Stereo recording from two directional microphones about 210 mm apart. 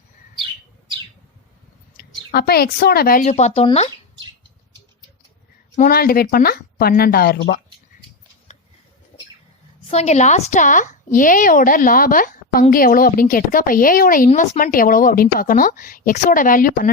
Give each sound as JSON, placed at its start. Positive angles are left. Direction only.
{"t": 2.0, "sound": "speech", "side_deg": 50}
{"t": 5.7, "sound": "speech", "side_deg": 40}
{"t": 9.9, "sound": "a woman's voice", "side_deg": 30}